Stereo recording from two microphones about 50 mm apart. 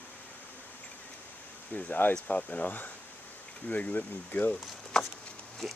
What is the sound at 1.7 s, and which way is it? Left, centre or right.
Speech, left.